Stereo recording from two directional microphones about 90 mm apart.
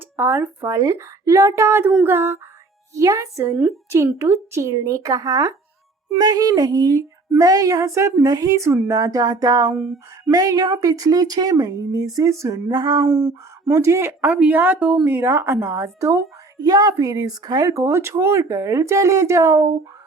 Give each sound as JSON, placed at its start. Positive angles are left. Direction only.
{"t": 0.2, "sound": "a sound", "side_deg": -25}
{"t": 0.6, "sound": "a woman's voice", "side_deg": -35}
{"t": 2.0, "sound": "a sound", "side_deg": -25}
{"t": 2.9, "sound": "a woman's voice", "side_deg": -35}
{"t": 12.7, "sound": "a sound", "side_deg": -55}
{"t": 13.1, "sound": "speech", "side_deg": -20}
{"t": 13.7, "sound": "a woman's voice", "side_deg": -35}
{"t": 15.0, "sound": "a woman's voice", "side_deg": -25}
{"t": 17.7, "sound": "a woman's voice", "side_deg": -30}